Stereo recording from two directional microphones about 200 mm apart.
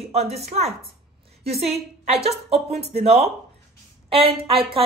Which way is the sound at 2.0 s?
30° right (ahead or behind).